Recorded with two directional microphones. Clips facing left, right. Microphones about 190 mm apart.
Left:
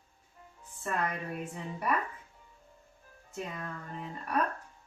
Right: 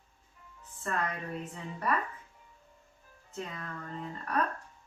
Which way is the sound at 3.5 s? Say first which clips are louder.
Left 1 dB; 10° left (ahead or behind).